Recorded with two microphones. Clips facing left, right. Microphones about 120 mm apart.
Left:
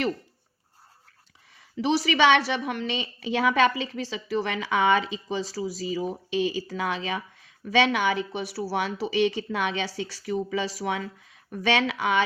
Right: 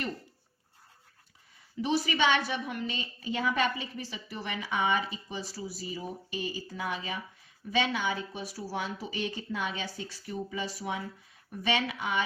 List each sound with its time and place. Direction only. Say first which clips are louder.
1.5 s a woman's voice: left 5 dB; 90° left